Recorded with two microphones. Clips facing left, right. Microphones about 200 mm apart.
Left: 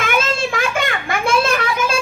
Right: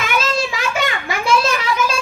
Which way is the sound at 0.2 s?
50° left (ahead or behind).